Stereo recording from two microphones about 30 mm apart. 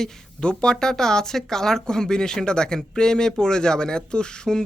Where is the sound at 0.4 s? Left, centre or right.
Left.